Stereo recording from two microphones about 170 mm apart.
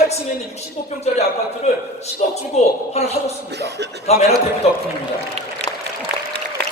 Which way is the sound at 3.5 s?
80° right.